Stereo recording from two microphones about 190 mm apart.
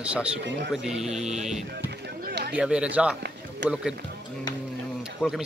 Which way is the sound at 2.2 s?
60° right (ahead or behind).